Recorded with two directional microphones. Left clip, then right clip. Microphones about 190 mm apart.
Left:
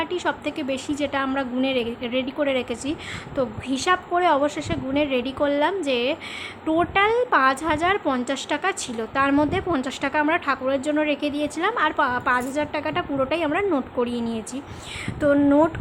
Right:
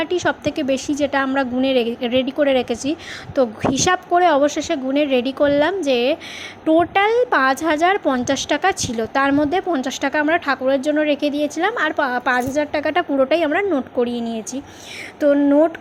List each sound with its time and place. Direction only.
0.0 s a woman's voice: 20° right (ahead or behind)